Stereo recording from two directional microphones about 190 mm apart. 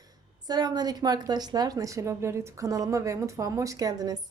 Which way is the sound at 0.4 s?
20° right (ahead or behind).